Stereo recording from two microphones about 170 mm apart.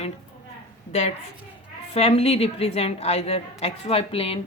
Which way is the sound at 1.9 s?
35° left (ahead or behind).